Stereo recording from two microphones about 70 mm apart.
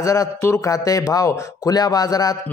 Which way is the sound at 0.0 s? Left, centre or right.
Left.